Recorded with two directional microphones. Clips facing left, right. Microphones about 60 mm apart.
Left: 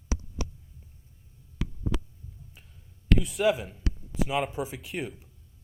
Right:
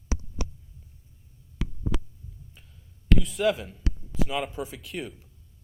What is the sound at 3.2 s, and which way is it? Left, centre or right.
Speech, centre.